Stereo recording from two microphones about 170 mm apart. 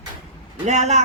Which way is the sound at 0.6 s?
45° right (ahead or behind).